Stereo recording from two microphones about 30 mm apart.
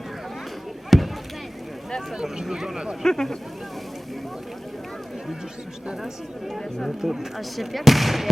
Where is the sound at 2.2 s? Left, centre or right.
Centre.